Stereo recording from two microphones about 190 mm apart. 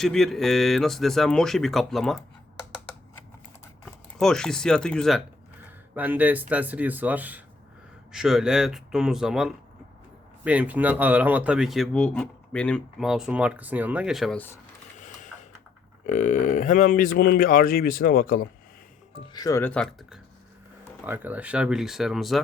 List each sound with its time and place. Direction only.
0.0 s speech: centre (ahead or behind)
3.8 s speech: 5° left (ahead or behind)
14.9 s a sound: 40° left (ahead or behind)
16.0 s speech: 40° left (ahead or behind)
19.1 s speech: 20° left (ahead or behind); by 20.1 s 5° left (ahead or behind)
21.0 s speech: 10° right (ahead or behind)